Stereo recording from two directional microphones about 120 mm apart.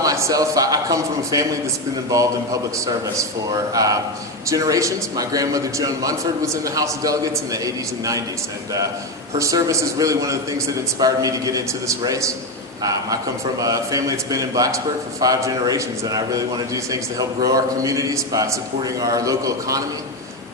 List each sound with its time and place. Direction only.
0.0 s a man's voice: 30° right (ahead or behind)
9.4 s a man's voice: 30° right (ahead or behind)